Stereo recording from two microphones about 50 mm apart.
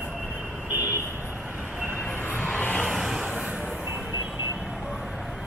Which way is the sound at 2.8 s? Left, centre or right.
Centre.